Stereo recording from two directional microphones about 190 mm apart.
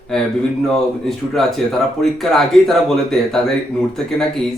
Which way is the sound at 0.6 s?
Centre (ahead or behind).